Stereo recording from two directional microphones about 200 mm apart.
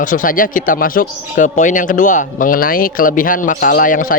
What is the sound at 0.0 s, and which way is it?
Speech, 40° left (ahead or behind).